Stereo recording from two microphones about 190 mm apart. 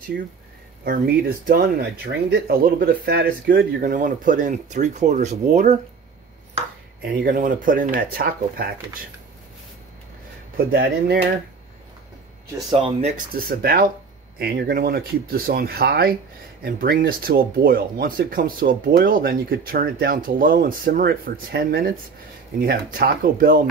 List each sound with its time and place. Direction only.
0.1 s speech: 65° right (ahead or behind)
0.8 s speech: 50° right (ahead or behind)
7.2 s speech: 45° right (ahead or behind)
10.7 s speech: 55° right (ahead or behind)
12.6 s speech: 30° right (ahead or behind)
13.3 s speech: 55° right (ahead or behind)